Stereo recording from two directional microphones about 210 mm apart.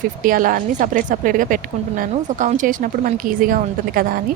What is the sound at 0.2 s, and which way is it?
A woman's voice, 40° right (ahead or behind).